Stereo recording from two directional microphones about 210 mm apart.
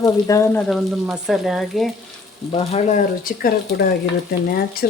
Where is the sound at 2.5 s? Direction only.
30° left (ahead or behind).